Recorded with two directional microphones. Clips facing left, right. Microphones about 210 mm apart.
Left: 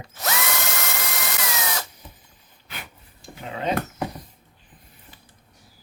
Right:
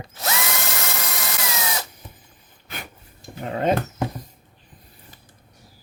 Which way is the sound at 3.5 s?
50° right (ahead or behind).